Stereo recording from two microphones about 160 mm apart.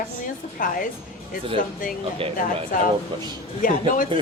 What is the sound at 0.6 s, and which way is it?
Speech, 60° left (ahead or behind).